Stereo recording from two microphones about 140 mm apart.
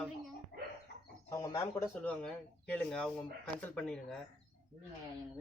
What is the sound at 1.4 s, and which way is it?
Speech, 20° left (ahead or behind).